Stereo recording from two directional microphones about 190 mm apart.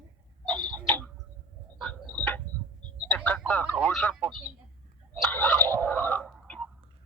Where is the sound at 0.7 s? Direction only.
10° left (ahead or behind).